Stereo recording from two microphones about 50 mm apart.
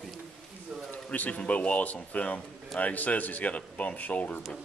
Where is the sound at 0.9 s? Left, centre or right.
Left.